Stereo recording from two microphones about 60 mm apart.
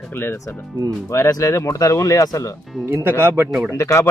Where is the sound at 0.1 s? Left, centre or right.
Left.